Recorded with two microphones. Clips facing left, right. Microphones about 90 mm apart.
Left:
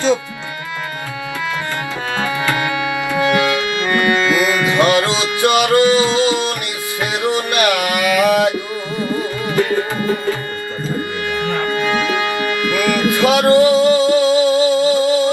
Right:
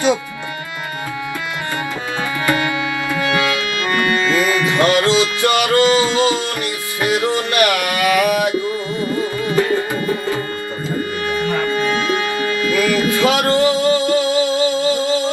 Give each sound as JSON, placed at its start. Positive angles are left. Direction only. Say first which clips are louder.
{"t": 2.6, "sound": "music", "louder": "left 1 dB", "side_deg": 20}
{"t": 11.9, "sound": "music", "louder": "left 1 dB", "side_deg": 20}